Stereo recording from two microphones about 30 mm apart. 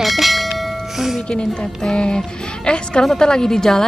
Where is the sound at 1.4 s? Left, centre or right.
Left.